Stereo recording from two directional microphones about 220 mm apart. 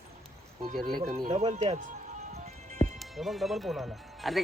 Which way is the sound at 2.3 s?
30° right (ahead or behind).